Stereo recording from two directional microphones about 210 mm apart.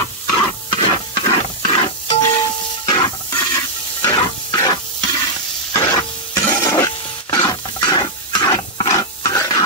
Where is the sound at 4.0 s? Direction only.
20° left (ahead or behind).